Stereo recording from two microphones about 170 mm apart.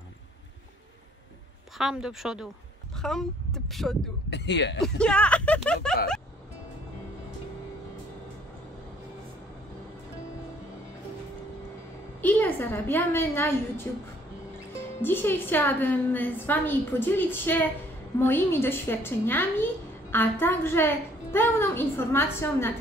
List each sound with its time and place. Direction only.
1.8 s speech: 5° right (ahead or behind)
4.3 s speech: 90° left
4.8 s speech: 5° left (ahead or behind)
12.2 s a woman's voice: 10° left (ahead or behind)
15.0 s a woman's voice: 10° left (ahead or behind)